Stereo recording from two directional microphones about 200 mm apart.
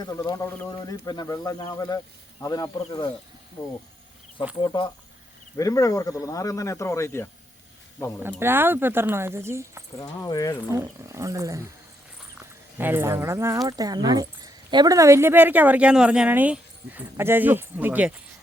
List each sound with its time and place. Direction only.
0.0 s speech: 20° left (ahead or behind)
4.6 s speech: 25° left (ahead or behind)
8.2 s speech: 10° right (ahead or behind)
10.0 s speech: 15° left (ahead or behind)
10.7 s speech: 15° right (ahead or behind)
12.7 s speech: 10° right (ahead or behind)